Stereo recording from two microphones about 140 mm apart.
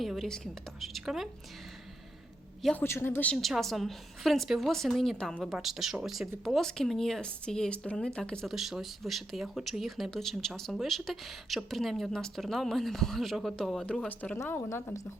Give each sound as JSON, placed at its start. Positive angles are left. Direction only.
{"t": 0.0, "sound": "a woman's voice", "side_deg": 0}
{"t": 2.7, "sound": "a man's voice", "side_deg": 15}
{"t": 3.3, "sound": "a woman's voice", "side_deg": 0}